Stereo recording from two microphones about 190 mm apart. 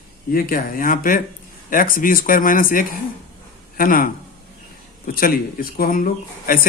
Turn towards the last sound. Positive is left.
turn(degrees=50)  # may be behind; listen again after turning